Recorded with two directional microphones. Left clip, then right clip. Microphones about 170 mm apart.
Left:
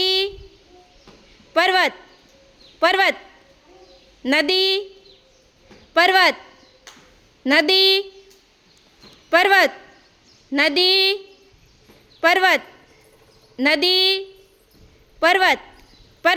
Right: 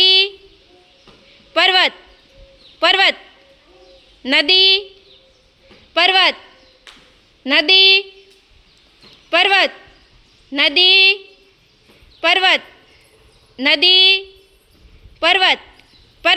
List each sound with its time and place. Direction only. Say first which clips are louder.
0.0 s a sound: right 8 dB; 15° left (ahead or behind)
1.5 s a sound: right 4 dB; 20° left (ahead or behind)
2.7 s a man's voice: right 3 dB; 15° left (ahead or behind)
4.2 s speech: right 6 dB; 15° left (ahead or behind)
5.9 s speech: right 2 dB; 25° left (ahead or behind)
7.4 s speech: right 4 dB; 25° left (ahead or behind)
9.3 s speech: right 1 dB; 25° left (ahead or behind)
12.2 s speech: right 2 dB; 25° left (ahead or behind)